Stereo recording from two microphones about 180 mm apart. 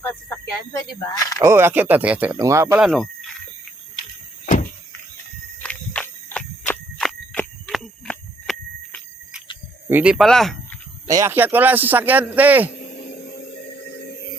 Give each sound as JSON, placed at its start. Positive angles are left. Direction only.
{"t": 1.0, "sound": "speech", "side_deg": 20}
{"t": 1.4, "sound": "a man's voice", "side_deg": -15}
{"t": 2.8, "sound": "speech", "side_deg": 0}
{"t": 5.6, "sound": "a sound", "side_deg": 5}
{"t": 9.9, "sound": "speech", "side_deg": -5}
{"t": 11.0, "sound": "a man's voice", "side_deg": -15}
{"t": 12.7, "sound": "a sound", "side_deg": 65}